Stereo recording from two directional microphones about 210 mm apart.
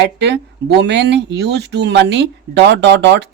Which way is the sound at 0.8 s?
55° right (ahead or behind).